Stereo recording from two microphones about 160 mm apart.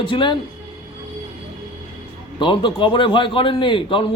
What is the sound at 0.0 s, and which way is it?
Speech, 30° left (ahead or behind).